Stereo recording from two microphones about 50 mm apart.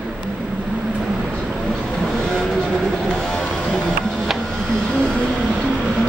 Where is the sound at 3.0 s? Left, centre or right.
Centre.